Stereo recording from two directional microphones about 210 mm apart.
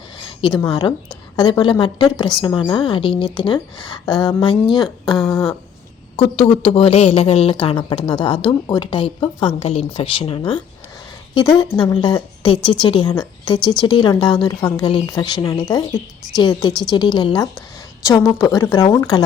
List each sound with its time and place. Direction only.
0.2 s a woman's voice: 20° left (ahead or behind)
6.1 s a woman's voice: 25° left (ahead or behind)